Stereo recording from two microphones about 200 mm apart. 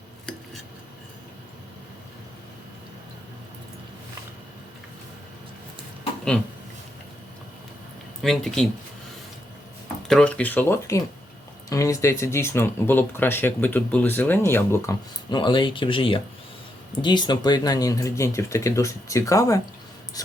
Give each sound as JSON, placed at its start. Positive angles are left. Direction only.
{"t": 8.2, "sound": "speech", "side_deg": 0}
{"t": 10.1, "sound": "speech", "side_deg": 5}
{"t": 20.2, "sound": "a sound", "side_deg": 20}